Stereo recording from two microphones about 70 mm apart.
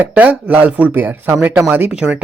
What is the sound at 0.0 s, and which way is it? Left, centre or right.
Speech, right.